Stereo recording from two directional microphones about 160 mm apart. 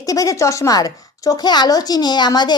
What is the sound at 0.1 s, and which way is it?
A woman's voice, 20° left (ahead or behind).